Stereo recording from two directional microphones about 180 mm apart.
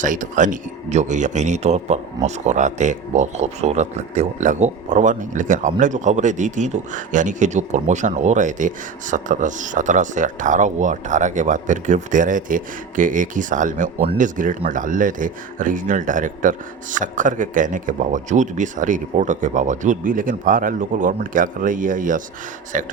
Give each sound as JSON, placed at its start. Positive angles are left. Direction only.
{"t": 0.0, "sound": "a man's voice", "side_deg": -45}